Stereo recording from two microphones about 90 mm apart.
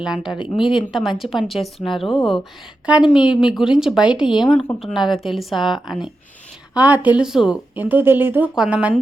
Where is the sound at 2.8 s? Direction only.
10° right (ahead or behind).